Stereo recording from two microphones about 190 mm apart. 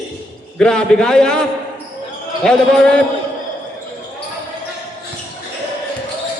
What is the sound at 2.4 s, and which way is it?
Speech, centre (ahead or behind).